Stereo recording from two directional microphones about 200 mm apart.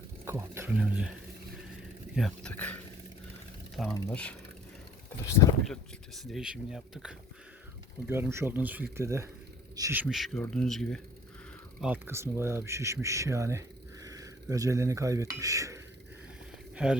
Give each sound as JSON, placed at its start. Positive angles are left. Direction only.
{"t": 0.3, "sound": "speech", "side_deg": -10}
{"t": 2.1, "sound": "speech", "side_deg": 5}
{"t": 3.9, "sound": "speech", "side_deg": 5}
{"t": 5.6, "sound": "speech", "side_deg": 0}
{"t": 11.8, "sound": "speech", "side_deg": -10}
{"t": 16.7, "sound": "speech", "side_deg": -5}